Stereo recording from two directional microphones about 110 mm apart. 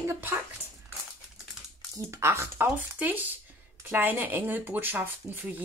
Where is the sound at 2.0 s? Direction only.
25° right (ahead or behind).